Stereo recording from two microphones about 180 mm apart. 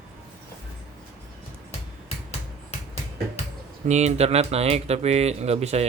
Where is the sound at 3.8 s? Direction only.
40° right (ahead or behind).